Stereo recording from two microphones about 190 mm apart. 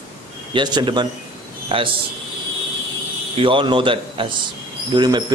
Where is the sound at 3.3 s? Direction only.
25° right (ahead or behind).